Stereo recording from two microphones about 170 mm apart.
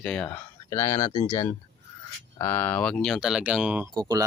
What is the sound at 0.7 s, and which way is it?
Speech, 20° left (ahead or behind).